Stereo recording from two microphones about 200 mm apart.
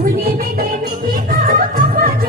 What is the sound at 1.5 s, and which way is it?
Music, 45° right (ahead or behind).